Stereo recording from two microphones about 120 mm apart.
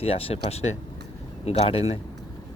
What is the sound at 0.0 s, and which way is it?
Speech, 55° left (ahead or behind).